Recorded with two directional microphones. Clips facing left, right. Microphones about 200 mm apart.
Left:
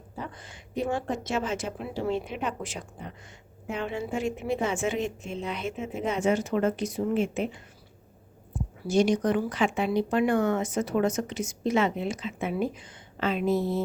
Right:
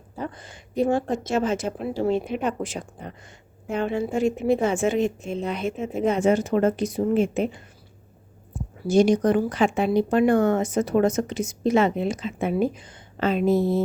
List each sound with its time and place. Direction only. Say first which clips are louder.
0.3 s speech: right 7 dB; 40° right (ahead or behind)
8.9 s speech: right 5 dB; 40° right (ahead or behind)